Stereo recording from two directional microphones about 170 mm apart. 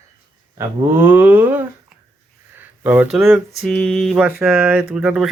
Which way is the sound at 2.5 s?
10° right (ahead or behind).